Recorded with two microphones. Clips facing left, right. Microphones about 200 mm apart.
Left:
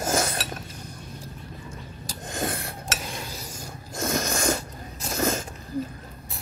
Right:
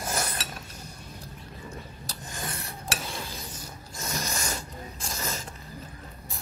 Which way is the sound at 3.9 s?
50° left (ahead or behind).